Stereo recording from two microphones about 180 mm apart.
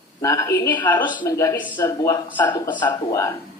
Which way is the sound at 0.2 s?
15° left (ahead or behind).